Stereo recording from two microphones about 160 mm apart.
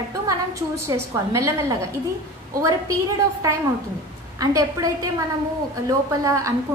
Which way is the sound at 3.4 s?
20° right (ahead or behind).